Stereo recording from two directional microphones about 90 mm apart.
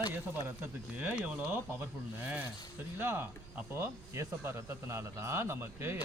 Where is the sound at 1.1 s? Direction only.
10° right (ahead or behind).